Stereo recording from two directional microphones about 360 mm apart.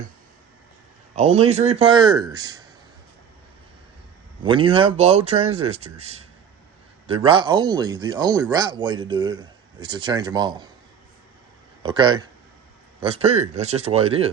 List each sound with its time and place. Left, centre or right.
1.1 s speech: centre
4.4 s speech: centre
11.8 s speech: centre